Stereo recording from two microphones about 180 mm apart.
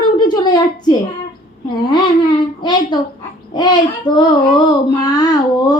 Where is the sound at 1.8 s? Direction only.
25° left (ahead or behind).